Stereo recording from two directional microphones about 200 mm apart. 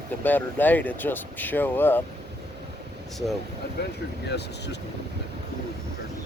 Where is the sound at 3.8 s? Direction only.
55° left (ahead or behind).